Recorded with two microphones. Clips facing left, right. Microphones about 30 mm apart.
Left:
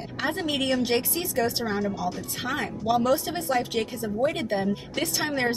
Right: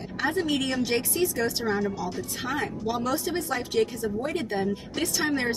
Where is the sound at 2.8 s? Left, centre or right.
Left.